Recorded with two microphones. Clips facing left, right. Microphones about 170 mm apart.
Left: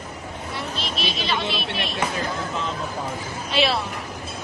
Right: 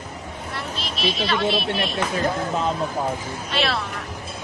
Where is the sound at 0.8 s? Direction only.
Centre (ahead or behind).